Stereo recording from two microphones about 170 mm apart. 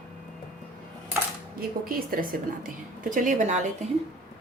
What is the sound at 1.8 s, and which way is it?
Speech, 60° right (ahead or behind).